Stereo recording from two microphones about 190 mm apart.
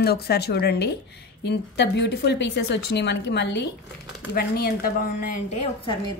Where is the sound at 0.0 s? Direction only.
55° left (ahead or behind).